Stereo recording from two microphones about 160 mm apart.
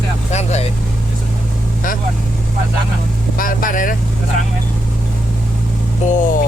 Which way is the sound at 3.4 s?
60° left (ahead or behind).